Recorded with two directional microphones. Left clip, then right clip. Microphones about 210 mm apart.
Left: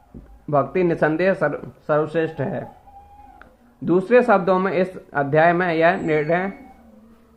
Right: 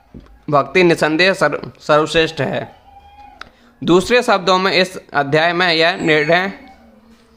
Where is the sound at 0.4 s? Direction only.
30° right (ahead or behind).